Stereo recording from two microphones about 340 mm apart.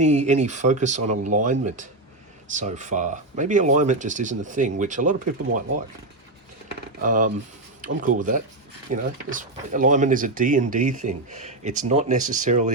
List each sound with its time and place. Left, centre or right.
0.0 s speech: centre
7.0 s speech: right